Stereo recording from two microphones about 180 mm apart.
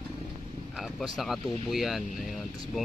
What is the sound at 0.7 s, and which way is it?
Speech, centre (ahead or behind).